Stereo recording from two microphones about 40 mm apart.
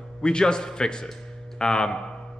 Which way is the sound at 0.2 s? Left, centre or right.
Left.